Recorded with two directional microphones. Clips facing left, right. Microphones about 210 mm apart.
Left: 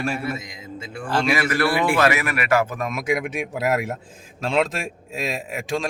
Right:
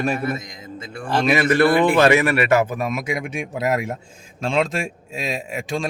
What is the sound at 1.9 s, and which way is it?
Speech, 30° right (ahead or behind).